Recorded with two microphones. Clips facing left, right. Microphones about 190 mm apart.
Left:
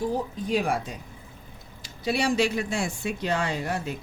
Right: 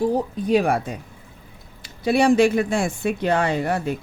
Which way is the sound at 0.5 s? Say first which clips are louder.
Right 7 dB; 60° right (ahead or behind).